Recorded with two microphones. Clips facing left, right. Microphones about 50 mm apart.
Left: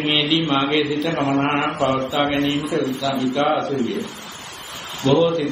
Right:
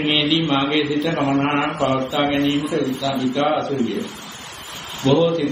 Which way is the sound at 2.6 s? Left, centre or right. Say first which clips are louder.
Even; right.